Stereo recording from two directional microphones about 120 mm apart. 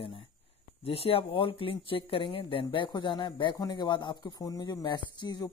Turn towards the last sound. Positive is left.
turn(degrees=35)  # may be behind; listen again after turning